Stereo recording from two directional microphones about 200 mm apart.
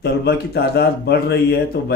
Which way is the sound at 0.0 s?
55° left (ahead or behind).